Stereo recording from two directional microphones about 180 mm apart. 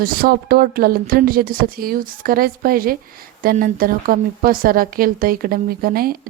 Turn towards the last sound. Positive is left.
turn(degrees=-55)  # may be behind; listen again after turning